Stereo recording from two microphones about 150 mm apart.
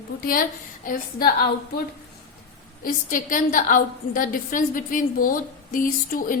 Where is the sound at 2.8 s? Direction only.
65° left (ahead or behind).